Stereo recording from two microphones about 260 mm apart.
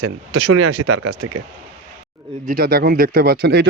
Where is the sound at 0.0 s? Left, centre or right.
Right.